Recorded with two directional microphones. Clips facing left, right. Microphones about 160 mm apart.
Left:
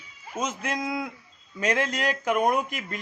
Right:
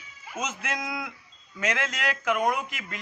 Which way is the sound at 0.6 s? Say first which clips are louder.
Left 4 dB; 35° left (ahead or behind).